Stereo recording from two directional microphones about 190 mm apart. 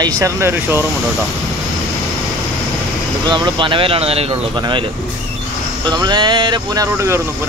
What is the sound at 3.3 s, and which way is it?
Speech, 25° right (ahead or behind).